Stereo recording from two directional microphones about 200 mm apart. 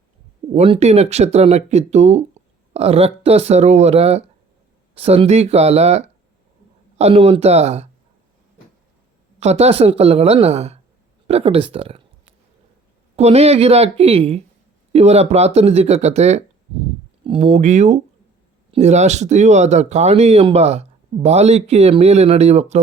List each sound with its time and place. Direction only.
0.5 s speech: 30° right (ahead or behind)
9.4 s speech: 35° right (ahead or behind)
13.1 s speech: 30° right (ahead or behind)